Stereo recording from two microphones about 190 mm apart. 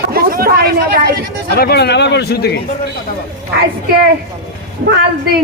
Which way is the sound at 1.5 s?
55° left (ahead or behind).